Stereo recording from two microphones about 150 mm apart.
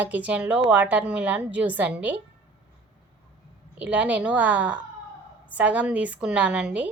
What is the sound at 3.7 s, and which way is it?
A woman's voice, 10° right (ahead or behind).